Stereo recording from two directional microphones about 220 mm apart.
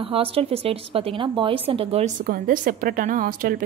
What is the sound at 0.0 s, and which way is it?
A woman's voice, 25° right (ahead or behind).